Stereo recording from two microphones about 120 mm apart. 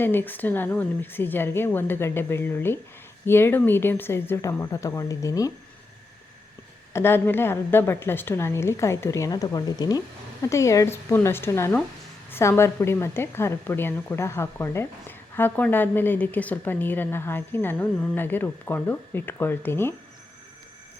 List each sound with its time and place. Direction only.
0.0 s a woman's voice: 15° left (ahead or behind)
6.9 s a woman's voice: 20° left (ahead or behind)